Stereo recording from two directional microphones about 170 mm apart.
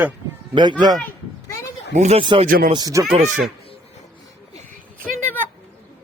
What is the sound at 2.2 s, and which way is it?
Speech, 30° right (ahead or behind).